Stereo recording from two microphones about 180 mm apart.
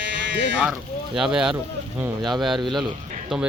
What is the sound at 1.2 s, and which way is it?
Speech, 5° right (ahead or behind).